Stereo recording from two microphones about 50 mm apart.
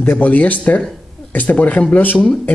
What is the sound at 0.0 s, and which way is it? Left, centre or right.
Speech, left.